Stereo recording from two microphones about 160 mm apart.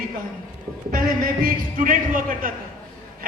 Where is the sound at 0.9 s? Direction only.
60° right (ahead or behind).